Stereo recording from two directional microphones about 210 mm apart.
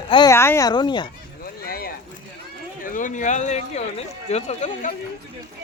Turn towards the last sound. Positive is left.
turn(degrees=35)  # may be behind; listen again after turning